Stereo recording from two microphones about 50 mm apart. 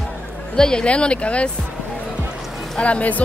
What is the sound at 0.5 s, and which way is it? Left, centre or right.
Speech, centre.